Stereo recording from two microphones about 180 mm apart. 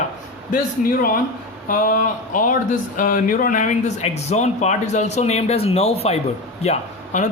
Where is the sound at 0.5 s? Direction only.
50° left (ahead or behind).